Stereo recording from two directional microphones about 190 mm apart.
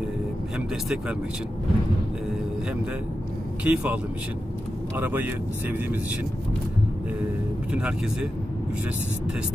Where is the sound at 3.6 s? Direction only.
5° right (ahead or behind).